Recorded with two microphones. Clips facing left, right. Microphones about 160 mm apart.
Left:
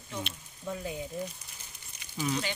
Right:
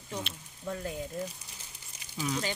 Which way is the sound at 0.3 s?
5° left (ahead or behind).